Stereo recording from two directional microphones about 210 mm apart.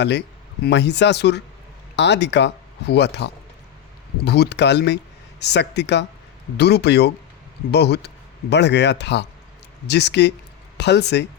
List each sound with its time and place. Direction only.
0.0 s speech: 55° left (ahead or behind)